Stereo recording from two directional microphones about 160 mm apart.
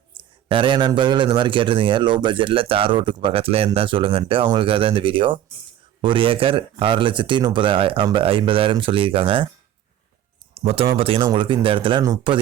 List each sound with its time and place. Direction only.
0.4 s speech: 30° right (ahead or behind)
10.5 s speech: 35° right (ahead or behind)